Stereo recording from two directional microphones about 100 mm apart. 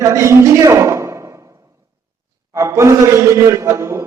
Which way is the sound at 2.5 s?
30° right (ahead or behind).